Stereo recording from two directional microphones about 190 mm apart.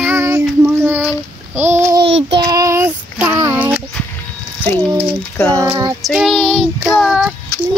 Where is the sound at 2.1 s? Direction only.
70° right (ahead or behind).